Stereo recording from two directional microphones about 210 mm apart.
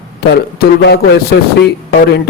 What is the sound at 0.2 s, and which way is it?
Speech, 50° left (ahead or behind).